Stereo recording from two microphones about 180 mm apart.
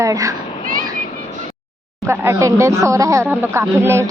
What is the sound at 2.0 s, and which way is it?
Speech, 15° right (ahead or behind).